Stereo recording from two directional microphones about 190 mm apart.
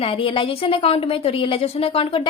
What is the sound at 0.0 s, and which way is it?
A woman's voice, 30° left (ahead or behind).